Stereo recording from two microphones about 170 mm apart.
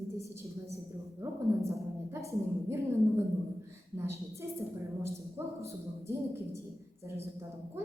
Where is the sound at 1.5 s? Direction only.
15° right (ahead or behind).